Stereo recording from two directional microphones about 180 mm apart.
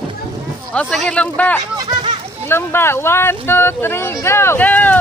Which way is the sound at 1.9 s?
25° right (ahead or behind).